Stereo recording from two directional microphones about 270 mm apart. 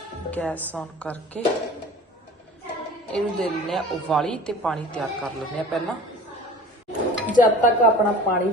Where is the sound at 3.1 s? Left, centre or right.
Centre.